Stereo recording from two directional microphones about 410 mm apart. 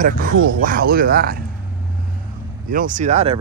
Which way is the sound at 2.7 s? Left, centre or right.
Centre.